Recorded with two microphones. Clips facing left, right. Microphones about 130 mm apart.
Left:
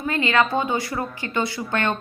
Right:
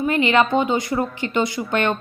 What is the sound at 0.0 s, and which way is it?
A woman's voice, 20° right (ahead or behind).